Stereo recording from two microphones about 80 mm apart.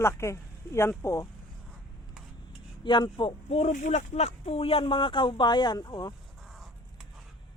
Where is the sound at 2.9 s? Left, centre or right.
Left.